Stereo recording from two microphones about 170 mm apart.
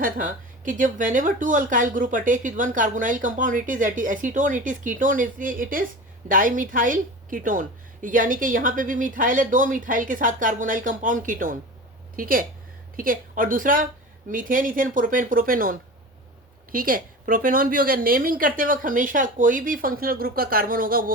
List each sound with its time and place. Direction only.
0.0 s speech: 50° right (ahead or behind)